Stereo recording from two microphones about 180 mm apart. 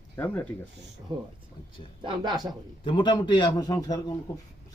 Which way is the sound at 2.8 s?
25° left (ahead or behind).